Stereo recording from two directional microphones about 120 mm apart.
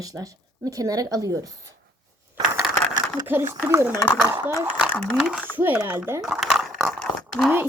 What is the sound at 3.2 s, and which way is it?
Speech, 15° right (ahead or behind).